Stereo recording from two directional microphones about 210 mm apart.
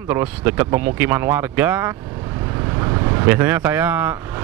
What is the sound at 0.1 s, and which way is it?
Speech, 10° right (ahead or behind).